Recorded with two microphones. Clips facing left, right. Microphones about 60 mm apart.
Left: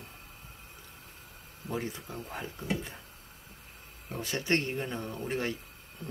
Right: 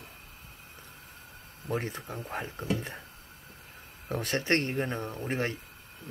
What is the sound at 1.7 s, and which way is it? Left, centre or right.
Speech, right.